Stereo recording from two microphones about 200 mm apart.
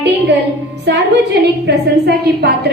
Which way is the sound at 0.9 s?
55° right (ahead or behind).